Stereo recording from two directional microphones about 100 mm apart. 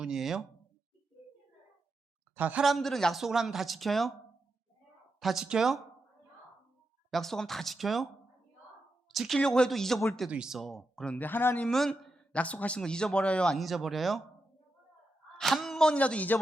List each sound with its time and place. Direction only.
0.0 s a man's voice: 5° right (ahead or behind)
2.3 s a woman's voice: 15° right (ahead or behind)
2.6 s a man's voice: centre (ahead or behind)
5.2 s a man's voice: 5° right (ahead or behind)
7.1 s a man's voice: 5° left (ahead or behind)
9.0 s a sound: centre (ahead or behind)
9.4 s a man's voice: 5° left (ahead or behind)
10.2 s speech: 10° right (ahead or behind); by 11.7 s 15° left (ahead or behind)
11.7 s a man's voice: 5° left (ahead or behind)
15.4 s speech: centre (ahead or behind)